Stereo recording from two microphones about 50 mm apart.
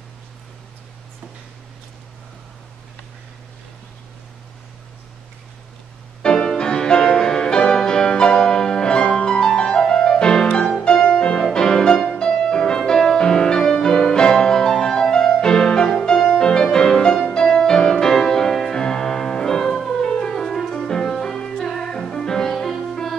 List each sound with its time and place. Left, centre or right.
6.2 s music: centre